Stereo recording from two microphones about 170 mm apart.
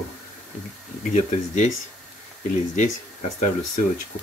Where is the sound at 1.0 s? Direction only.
45° left (ahead or behind).